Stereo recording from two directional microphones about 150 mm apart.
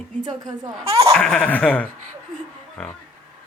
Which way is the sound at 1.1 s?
5° left (ahead or behind).